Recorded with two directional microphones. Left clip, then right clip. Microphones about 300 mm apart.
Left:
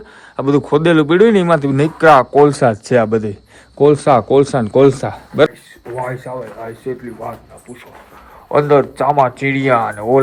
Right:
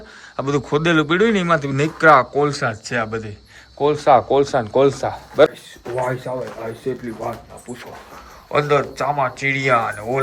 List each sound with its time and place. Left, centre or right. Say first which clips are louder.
0.3 s a man's voice: left 6 dB; centre; by 5.2 s left
6.0 s a man's voice: even; centre
8.4 s speech: left 6 dB; centre